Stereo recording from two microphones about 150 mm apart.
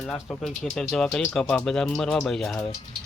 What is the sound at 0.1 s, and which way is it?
Speech, 5° left (ahead or behind).